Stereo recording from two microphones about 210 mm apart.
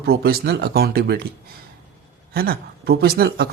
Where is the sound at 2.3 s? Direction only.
45° right (ahead or behind).